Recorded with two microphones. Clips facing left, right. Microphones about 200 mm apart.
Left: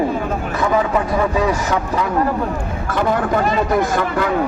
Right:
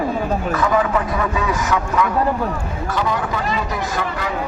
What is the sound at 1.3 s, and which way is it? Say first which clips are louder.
Speech: left 3 dB; 35° left (ahead or behind).